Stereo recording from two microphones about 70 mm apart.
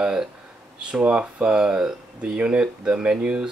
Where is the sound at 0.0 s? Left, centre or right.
Centre.